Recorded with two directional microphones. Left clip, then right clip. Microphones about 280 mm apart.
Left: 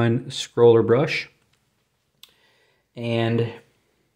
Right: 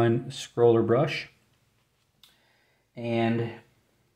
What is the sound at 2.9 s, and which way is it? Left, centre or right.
Speech, left.